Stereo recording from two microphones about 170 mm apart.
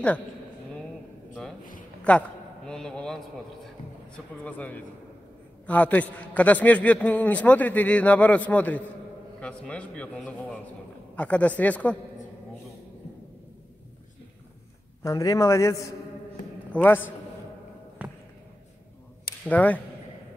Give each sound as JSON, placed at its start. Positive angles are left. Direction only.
{"t": 2.0, "sound": "a sound", "side_deg": 5}
{"t": 4.5, "sound": "a man's voice", "side_deg": 10}
{"t": 15.0, "sound": "speech", "side_deg": 20}
{"t": 16.7, "sound": "a man's voice", "side_deg": 10}
{"t": 19.4, "sound": "a man's voice", "side_deg": 10}